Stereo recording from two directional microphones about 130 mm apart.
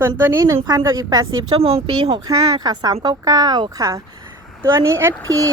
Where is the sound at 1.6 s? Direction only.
50° right (ahead or behind).